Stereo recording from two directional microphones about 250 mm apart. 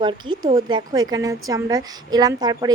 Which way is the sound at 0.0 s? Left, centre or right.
Centre.